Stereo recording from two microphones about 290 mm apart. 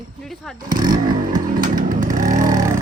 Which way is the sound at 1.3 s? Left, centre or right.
Right.